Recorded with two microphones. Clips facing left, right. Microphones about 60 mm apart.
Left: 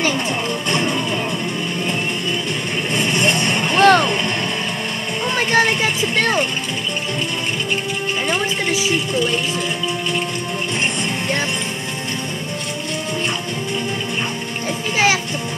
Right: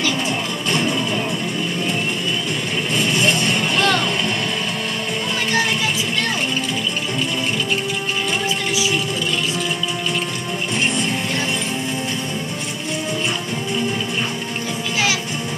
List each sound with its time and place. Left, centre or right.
2.9 s vehicle: left
3.8 s vehicle: left
5.5 s vehicle: left